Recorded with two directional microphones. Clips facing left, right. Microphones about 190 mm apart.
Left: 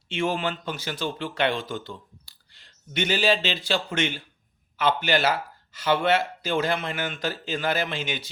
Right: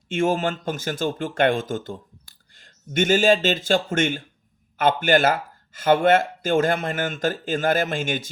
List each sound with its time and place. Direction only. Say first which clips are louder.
0.1 s speech: right 5 dB; 45° right (ahead or behind)